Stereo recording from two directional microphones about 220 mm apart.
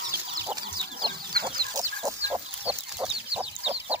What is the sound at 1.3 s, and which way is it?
Chicken, 45° right (ahead or behind).